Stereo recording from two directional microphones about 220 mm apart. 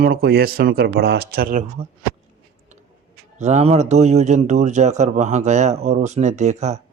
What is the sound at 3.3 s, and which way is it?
Speech, 30° right (ahead or behind).